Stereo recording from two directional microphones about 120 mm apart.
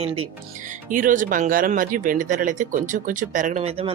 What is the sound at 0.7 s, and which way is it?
Speech, 90° right.